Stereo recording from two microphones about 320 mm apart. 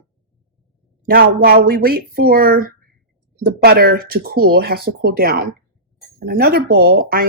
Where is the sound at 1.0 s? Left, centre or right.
Right.